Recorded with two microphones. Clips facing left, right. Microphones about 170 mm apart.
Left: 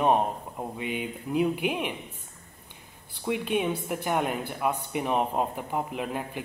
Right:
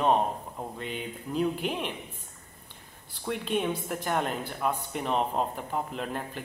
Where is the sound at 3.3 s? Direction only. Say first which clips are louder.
Left 2 dB; 5° left (ahead or behind).